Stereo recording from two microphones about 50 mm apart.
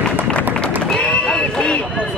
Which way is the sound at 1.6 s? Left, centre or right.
Left.